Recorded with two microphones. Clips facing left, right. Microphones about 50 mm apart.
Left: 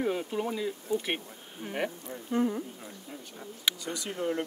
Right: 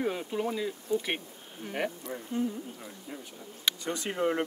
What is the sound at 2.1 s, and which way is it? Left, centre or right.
Speech, centre.